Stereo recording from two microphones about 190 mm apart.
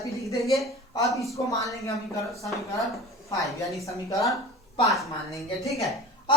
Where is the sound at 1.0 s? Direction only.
15° left (ahead or behind).